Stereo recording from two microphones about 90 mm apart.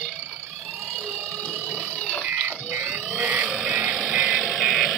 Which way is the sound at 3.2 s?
15° right (ahead or behind).